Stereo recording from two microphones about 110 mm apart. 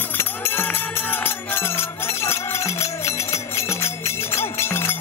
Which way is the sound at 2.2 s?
25° left (ahead or behind).